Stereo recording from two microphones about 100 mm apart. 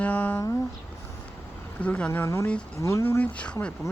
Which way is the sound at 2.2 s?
30° left (ahead or behind).